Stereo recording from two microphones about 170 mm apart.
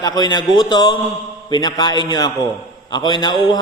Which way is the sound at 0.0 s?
25° left (ahead or behind).